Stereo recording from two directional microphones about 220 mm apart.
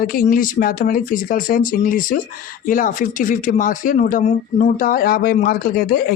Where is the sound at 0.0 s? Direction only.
40° left (ahead or behind).